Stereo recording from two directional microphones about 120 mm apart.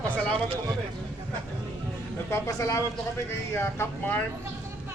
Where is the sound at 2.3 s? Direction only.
25° left (ahead or behind).